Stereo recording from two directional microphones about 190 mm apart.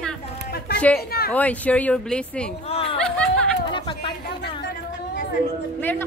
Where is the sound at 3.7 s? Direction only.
25° left (ahead or behind).